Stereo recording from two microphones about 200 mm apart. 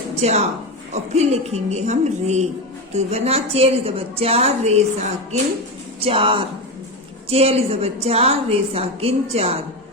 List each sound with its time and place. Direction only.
0.2 s a woman's voice: 35° right (ahead or behind)